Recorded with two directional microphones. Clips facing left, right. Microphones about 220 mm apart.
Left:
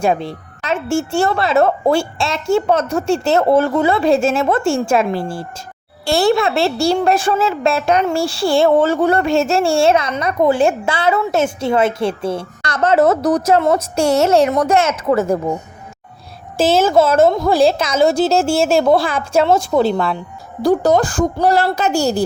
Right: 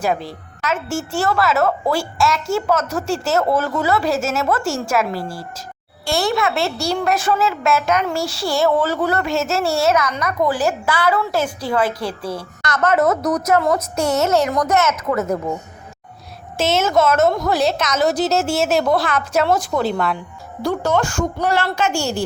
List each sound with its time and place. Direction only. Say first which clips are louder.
0.0 s a woman's voice: left 4 dB; 25° left (ahead or behind)
16.6 s a woman's voice: left 4 dB; 30° left (ahead or behind)